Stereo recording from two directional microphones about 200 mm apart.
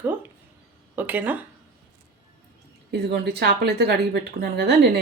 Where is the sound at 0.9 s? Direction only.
10° right (ahead or behind).